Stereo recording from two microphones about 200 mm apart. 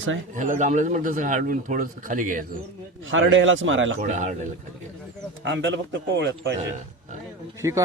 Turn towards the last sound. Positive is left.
turn(degrees=-15)  # may be behind; listen again after turning